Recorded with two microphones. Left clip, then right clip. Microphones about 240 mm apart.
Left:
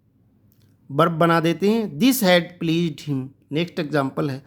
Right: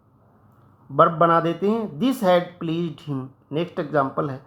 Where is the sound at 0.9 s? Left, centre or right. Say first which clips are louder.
Right 2 dB; left.